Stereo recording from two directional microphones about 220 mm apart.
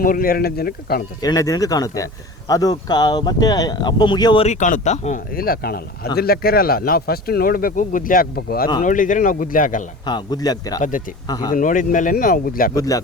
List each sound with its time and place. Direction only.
0.0 s speech: 40° left (ahead or behind)
1.2 s speech: 15° left (ahead or behind); by 9.8 s 35° left (ahead or behind)
10.1 s speech: 20° left (ahead or behind)
11.5 s speech: 35° left (ahead or behind)
12.7 s speech: 15° left (ahead or behind)